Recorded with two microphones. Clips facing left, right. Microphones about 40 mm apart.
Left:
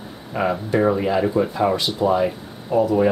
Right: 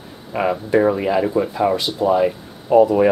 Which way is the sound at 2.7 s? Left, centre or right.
Right.